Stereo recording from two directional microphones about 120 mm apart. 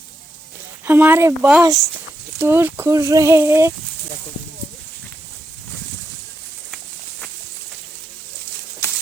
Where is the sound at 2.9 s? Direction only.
30° right (ahead or behind).